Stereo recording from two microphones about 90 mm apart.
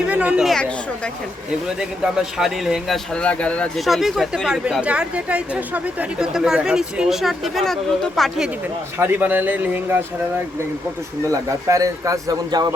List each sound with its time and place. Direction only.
0.1 s speech: 15° right (ahead or behind)
1.8 s speech: 5° right (ahead or behind); by 3.7 s 15° left (ahead or behind)
3.8 s speech: centre (ahead or behind)
9.0 s speech: 25° right (ahead or behind)
11.3 s a man's voice: 40° right (ahead or behind)